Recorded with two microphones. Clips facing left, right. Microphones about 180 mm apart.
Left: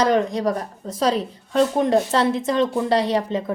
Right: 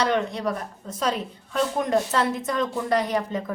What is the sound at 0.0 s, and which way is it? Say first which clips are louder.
A woman's voice: left 5 dB; 40° left (ahead or behind).